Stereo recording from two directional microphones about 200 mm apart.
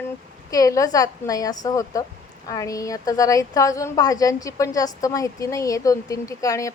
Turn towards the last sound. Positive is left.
turn(degrees=15)  # may be behind; listen again after turning